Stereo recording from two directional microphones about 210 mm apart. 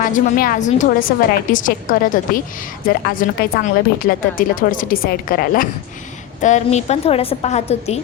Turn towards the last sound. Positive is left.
turn(degrees=30)  # may be behind; listen again after turning